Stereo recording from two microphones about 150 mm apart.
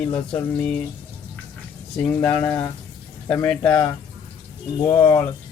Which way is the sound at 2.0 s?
10° left (ahead or behind).